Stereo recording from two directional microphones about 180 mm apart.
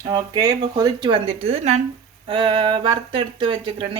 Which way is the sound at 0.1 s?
20° right (ahead or behind).